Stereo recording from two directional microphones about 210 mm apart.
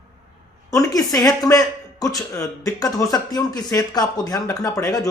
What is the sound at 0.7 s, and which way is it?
Speech, 15° left (ahead or behind).